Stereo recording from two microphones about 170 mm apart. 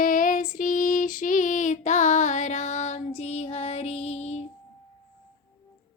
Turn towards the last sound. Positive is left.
turn(degrees=40)  # may be behind; listen again after turning